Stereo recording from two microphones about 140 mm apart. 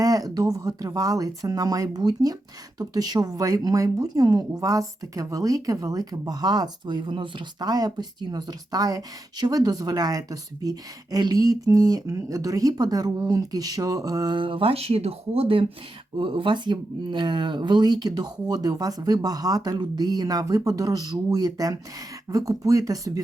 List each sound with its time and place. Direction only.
0.0 s speech: 25° right (ahead or behind)